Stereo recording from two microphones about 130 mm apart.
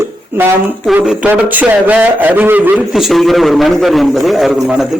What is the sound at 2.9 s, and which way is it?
A man's voice, centre (ahead or behind).